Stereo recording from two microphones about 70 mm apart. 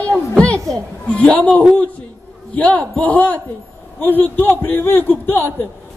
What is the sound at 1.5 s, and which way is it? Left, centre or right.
Speech, centre.